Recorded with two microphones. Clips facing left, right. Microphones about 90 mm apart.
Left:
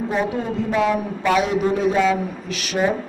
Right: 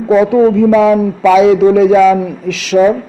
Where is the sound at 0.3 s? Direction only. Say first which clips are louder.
Right 15 dB; 90° right.